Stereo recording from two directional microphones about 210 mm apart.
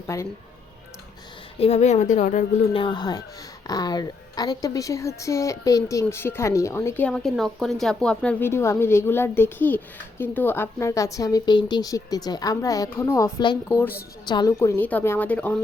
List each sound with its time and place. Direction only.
0.1 s a woman's voice: 15° left (ahead or behind)
1.5 s a woman's voice: 30° left (ahead or behind)
2.8 s a woman's voice: 20° left (ahead or behind)